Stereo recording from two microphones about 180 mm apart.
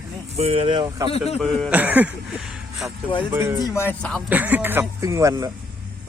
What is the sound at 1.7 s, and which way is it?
Speech, 10° right (ahead or behind).